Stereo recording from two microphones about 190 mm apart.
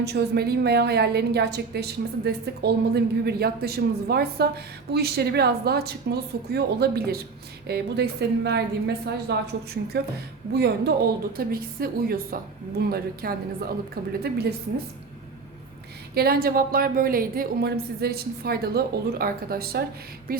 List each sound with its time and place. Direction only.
0.0 s a woman's voice: 60° right (ahead or behind)
10.5 s a woman's voice: 60° right (ahead or behind)
16.1 s a woman's voice: 55° right (ahead or behind)